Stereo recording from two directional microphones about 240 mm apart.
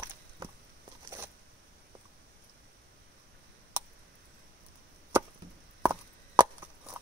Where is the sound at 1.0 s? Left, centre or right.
Centre.